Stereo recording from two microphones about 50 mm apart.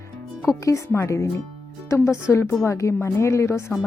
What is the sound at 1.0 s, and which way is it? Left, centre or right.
Speech, left.